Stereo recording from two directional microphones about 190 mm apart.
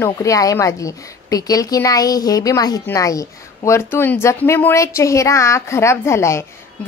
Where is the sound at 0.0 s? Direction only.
15° left (ahead or behind).